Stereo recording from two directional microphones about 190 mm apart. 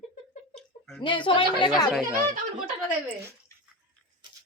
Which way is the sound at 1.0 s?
25° left (ahead or behind).